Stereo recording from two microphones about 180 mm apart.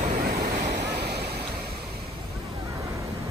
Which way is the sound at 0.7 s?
60° right (ahead or behind).